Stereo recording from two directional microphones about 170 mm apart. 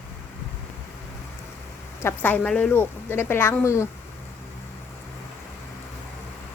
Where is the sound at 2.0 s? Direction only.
10° left (ahead or behind).